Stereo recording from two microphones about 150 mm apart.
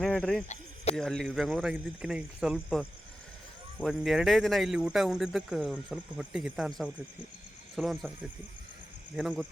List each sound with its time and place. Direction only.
0.0 s speech: 5° left (ahead or behind)
0.4 s a sound: 50° left (ahead or behind)
0.9 s speech: 5° left (ahead or behind)
9.1 s speech: 5° right (ahead or behind)